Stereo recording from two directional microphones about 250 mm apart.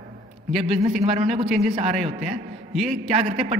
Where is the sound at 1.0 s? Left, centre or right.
Right.